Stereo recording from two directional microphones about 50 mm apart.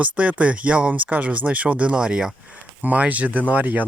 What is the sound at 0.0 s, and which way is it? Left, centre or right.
Speech, right.